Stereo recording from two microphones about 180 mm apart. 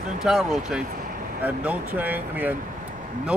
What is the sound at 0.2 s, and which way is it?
Speech, centre (ahead or behind).